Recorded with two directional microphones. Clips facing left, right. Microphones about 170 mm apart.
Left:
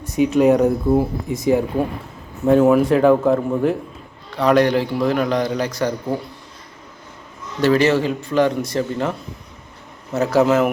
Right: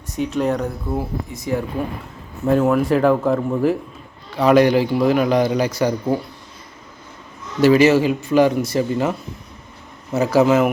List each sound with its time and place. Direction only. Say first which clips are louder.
0.2 s speech: left 7 dB; 10° left (ahead or behind)
2.5 s a man's voice: left 3 dB; centre (ahead or behind)
7.6 s a man's voice: right 3 dB; 10° right (ahead or behind)